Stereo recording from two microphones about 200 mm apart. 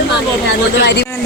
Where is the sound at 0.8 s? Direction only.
55° left (ahead or behind).